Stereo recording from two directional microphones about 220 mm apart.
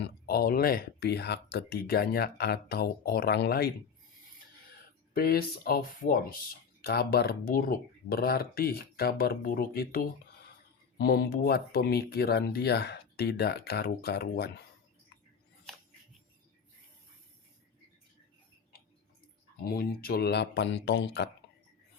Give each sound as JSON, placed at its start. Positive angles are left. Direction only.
{"t": 0.0, "sound": "speech", "side_deg": 45}
{"t": 5.1, "sound": "speech", "side_deg": 45}
{"t": 19.6, "sound": "speech", "side_deg": 45}